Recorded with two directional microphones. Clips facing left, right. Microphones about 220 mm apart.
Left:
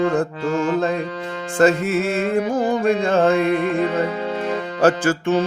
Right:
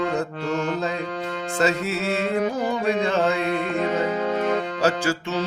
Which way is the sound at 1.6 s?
50° left (ahead or behind).